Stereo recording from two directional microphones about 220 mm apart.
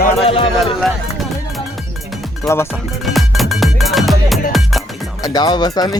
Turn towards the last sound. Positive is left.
turn(degrees=15)  # may be behind; listen again after turning